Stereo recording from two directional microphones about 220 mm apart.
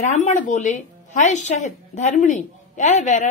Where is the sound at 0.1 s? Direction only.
35° left (ahead or behind).